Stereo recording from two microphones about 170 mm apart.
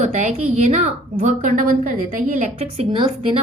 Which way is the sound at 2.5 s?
35° right (ahead or behind).